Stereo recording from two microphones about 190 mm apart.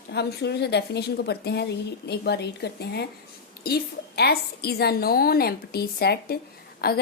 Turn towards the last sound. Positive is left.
turn(degrees=55)  # may be behind; listen again after turning